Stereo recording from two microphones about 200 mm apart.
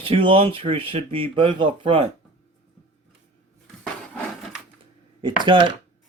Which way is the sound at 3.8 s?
Centre (ahead or behind).